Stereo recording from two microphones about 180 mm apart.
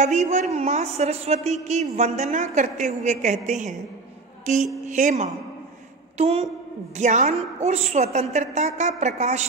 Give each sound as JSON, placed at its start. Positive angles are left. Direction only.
{"t": 0.0, "sound": "a woman's voice", "side_deg": -40}
{"t": 4.8, "sound": "a woman's voice", "side_deg": -45}